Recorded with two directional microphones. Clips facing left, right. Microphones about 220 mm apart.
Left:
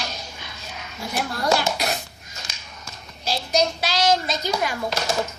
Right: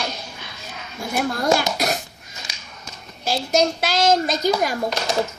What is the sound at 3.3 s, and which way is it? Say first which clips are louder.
A woman's voice: right 3 dB; 50° right (ahead or behind).